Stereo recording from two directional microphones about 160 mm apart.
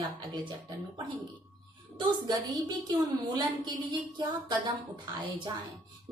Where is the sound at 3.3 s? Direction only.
25° right (ahead or behind).